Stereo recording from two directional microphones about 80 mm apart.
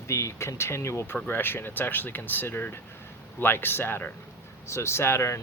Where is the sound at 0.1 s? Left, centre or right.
Left.